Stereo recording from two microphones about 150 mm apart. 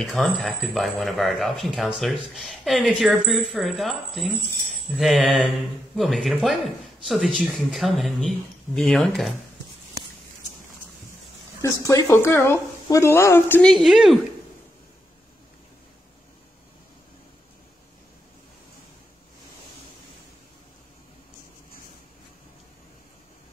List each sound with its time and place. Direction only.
0.0 s speech: centre (ahead or behind)
11.6 s speech: 20° left (ahead or behind)
13.7 s speech: centre (ahead or behind)